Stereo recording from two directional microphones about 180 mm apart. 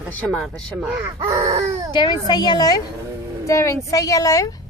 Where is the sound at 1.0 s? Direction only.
15° right (ahead or behind).